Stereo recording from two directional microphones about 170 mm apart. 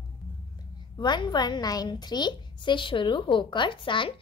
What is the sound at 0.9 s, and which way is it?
A woman's voice, 25° left (ahead or behind).